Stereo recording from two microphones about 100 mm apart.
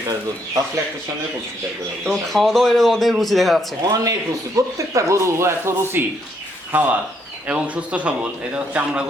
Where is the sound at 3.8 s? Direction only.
40° right (ahead or behind).